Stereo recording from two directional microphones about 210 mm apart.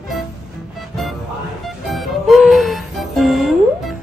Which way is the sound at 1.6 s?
Centre (ahead or behind).